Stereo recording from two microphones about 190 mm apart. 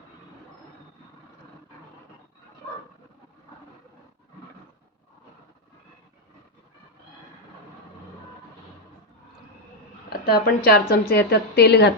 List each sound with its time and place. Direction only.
10.1 s a woman's voice: 55° left (ahead or behind)